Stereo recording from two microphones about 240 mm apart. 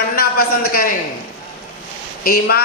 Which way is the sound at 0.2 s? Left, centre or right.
Left.